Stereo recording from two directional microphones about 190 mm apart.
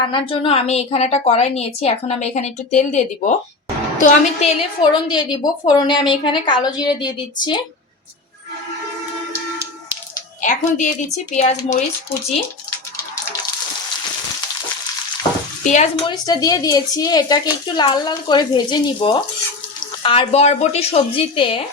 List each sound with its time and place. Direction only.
0.0 s a woman's voice: 25° left (ahead or behind)
10.4 s a woman's voice: 40° left (ahead or behind)
15.6 s a woman's voice: 40° left (ahead or behind)
16.0 s a woman's voice: 25° left (ahead or behind)